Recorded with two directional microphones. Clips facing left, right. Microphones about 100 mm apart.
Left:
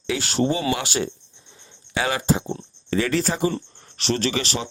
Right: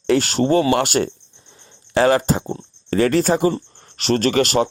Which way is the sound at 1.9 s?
45° right (ahead or behind).